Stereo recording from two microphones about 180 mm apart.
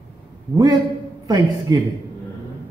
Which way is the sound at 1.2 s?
20° right (ahead or behind).